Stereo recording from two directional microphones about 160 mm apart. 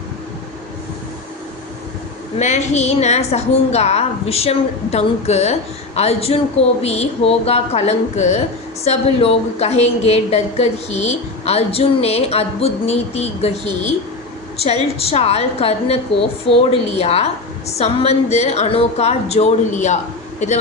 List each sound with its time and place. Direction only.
2.4 s a woman's voice: 45° left (ahead or behind)